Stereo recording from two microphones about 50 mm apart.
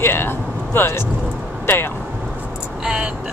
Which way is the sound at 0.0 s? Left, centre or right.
Left.